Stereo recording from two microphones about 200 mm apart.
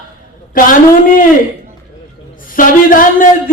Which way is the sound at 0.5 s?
45° left (ahead or behind).